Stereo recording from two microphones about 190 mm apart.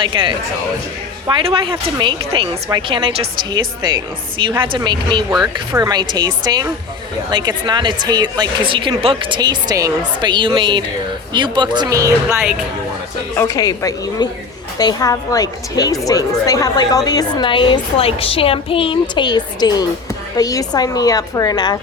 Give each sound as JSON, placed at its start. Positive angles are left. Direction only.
{"t": 0.0, "sound": "a woman's voice", "side_deg": -25}
{"t": 13.3, "sound": "a woman's voice", "side_deg": 15}